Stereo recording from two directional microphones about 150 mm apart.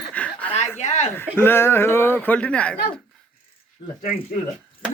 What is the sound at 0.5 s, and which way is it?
Speech, 50° left (ahead or behind).